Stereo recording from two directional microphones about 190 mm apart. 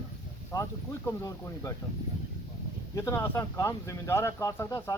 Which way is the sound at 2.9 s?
15° left (ahead or behind).